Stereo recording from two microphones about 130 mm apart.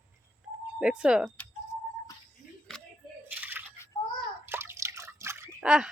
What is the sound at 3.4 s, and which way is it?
Bathtub, 15° right (ahead or behind).